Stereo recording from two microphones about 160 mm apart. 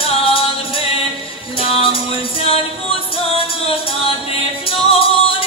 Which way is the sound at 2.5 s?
35° left (ahead or behind).